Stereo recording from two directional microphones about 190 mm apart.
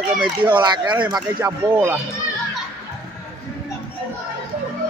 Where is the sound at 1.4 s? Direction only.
10° right (ahead or behind).